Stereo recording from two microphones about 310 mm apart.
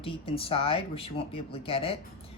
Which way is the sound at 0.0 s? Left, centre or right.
Centre.